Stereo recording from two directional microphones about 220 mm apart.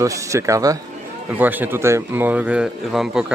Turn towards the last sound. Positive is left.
turn(degrees=0)  # may be behind; listen again after turning